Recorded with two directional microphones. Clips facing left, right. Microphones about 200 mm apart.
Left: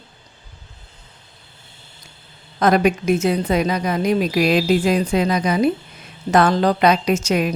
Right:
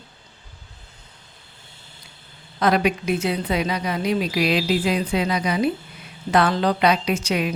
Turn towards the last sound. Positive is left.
turn(degrees=45)  # may be behind; listen again after turning